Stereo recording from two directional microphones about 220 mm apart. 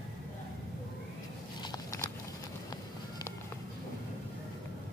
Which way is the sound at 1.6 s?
15° left (ahead or behind).